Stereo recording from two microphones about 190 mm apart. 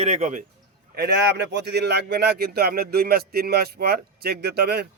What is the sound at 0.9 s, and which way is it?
Speech, 60° right (ahead or behind).